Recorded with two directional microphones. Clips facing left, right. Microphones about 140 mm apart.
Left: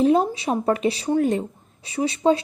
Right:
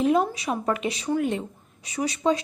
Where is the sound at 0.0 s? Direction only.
30° left (ahead or behind).